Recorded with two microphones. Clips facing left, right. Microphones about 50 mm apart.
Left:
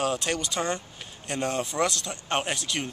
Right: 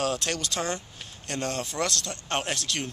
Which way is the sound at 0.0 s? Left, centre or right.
Centre.